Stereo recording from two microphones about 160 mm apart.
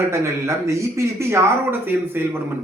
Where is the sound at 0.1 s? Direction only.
20° right (ahead or behind).